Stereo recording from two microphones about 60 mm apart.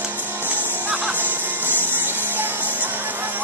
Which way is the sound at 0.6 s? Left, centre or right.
Right.